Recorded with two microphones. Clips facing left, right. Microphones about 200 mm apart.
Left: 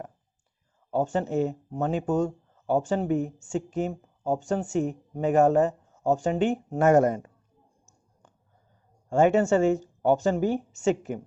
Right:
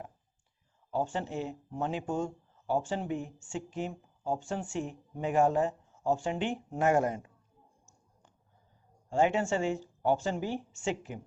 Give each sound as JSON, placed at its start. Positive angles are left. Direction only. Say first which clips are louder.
{"t": 0.9, "sound": "a woman's voice", "louder": "left 7 dB", "side_deg": 45}
{"t": 9.0, "sound": "a woman's voice", "louder": "left 7 dB", "side_deg": 45}